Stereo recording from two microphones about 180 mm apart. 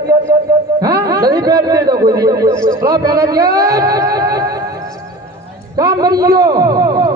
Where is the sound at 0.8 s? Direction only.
20° right (ahead or behind).